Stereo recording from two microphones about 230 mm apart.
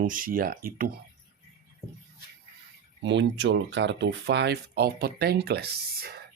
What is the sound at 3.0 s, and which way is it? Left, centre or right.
Speech, right.